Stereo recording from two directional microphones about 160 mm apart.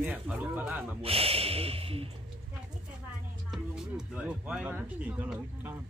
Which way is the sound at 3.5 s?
5° right (ahead or behind).